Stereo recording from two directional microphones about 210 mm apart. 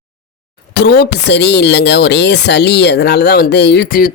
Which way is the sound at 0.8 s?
50° left (ahead or behind).